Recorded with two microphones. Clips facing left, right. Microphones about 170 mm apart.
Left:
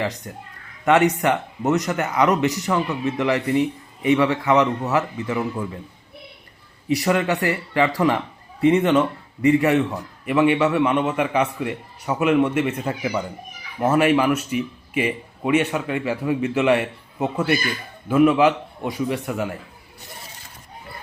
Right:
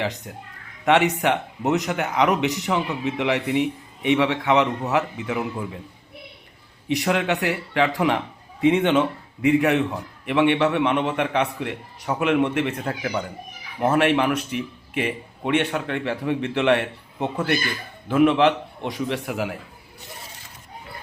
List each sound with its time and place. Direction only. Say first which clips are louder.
0.0 s a man's voice: left 1 dB; centre (ahead or behind)
6.8 s a man's voice: left 2 dB; centre (ahead or behind)